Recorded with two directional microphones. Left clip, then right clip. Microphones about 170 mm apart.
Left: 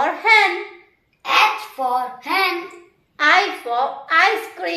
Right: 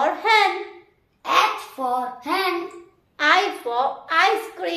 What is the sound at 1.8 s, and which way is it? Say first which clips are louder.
Speech: left 3 dB; 45° right (ahead or behind).